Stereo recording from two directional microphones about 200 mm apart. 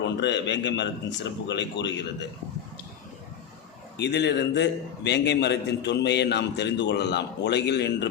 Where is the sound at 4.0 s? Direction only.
60° left (ahead or behind).